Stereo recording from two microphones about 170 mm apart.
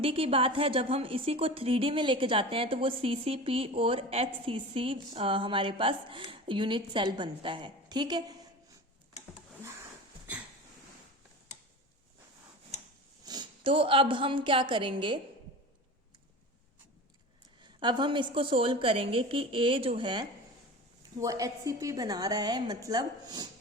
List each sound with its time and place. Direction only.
0.0 s a woman's voice: 35° right (ahead or behind)
13.2 s a woman's voice: 25° right (ahead or behind)
17.6 s a woman's voice: 25° right (ahead or behind)